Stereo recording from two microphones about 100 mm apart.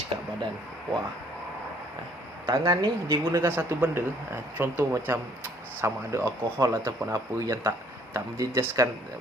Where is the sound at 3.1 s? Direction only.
25° right (ahead or behind).